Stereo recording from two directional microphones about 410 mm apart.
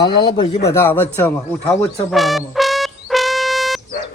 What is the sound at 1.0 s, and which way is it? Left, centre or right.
Music, centre.